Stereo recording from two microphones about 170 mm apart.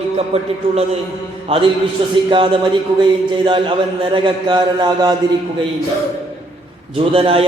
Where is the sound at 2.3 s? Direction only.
30° right (ahead or behind).